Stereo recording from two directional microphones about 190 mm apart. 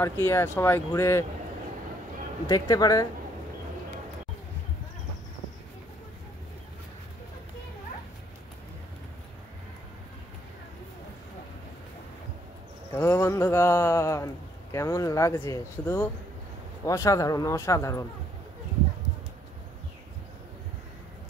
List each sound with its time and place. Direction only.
0.0 s a man's voice: 15° left (ahead or behind)
2.4 s speech: 20° left (ahead or behind)
12.9 s a man's voice: 15° left (ahead or behind)